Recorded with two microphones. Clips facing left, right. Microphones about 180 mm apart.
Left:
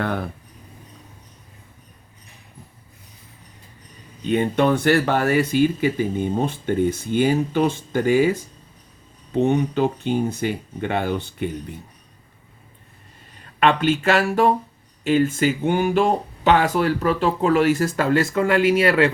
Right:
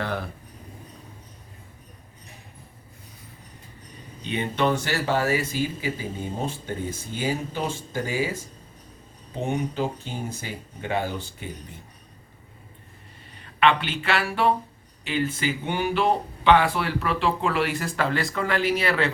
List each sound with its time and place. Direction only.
4.2 s speech: 45° left (ahead or behind); by 8.2 s 65° left (ahead or behind)
9.4 s speech: 70° left (ahead or behind)
13.6 s speech: 45° left (ahead or behind)